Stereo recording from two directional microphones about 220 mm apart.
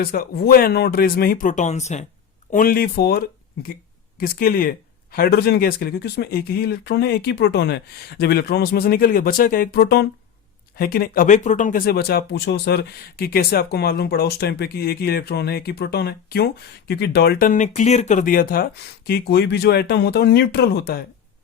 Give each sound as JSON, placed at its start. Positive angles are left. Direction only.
{"t": 0.0, "sound": "speech", "side_deg": 40}